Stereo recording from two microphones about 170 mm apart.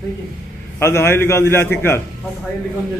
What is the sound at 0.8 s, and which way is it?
A man's voice, 15° left (ahead or behind).